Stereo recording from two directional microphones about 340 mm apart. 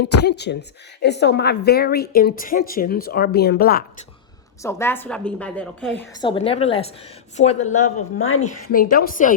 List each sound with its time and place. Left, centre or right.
0.3 s speech: left
4.6 s a woman's voice: centre
7.9 s speech: left
8.4 s speech: left